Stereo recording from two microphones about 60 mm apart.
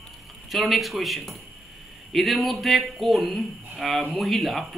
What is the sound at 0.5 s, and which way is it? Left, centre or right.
A man's voice, centre.